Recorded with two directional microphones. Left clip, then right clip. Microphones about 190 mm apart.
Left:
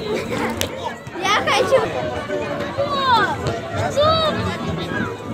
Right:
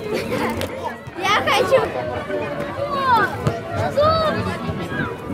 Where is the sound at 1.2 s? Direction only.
15° right (ahead or behind).